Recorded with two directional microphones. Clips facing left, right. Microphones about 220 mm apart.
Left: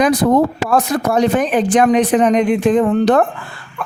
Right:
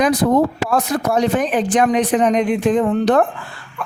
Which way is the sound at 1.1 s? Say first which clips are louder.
Left 3 dB; 65° left (ahead or behind).